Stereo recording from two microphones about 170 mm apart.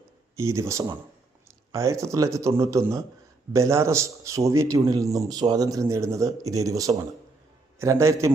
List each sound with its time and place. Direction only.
0.3 s a man's voice: 15° right (ahead or behind)